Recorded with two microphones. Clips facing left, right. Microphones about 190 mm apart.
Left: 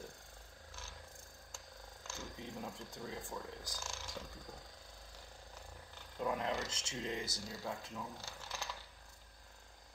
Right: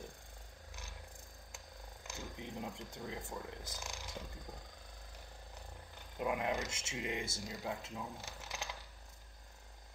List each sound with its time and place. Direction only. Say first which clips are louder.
2.0 s speech: right 1 dB; 20° right (ahead or behind)
6.1 s speech: right 1 dB; 15° right (ahead or behind)
7.2 s speech: right 2 dB; 20° right (ahead or behind)